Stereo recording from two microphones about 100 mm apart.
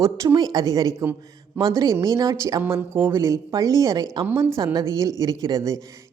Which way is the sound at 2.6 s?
20° right (ahead or behind).